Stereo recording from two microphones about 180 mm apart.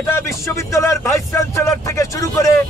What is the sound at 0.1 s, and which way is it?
Speech, 15° left (ahead or behind).